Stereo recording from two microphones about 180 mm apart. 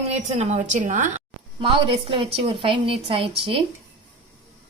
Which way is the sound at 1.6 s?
30° right (ahead or behind).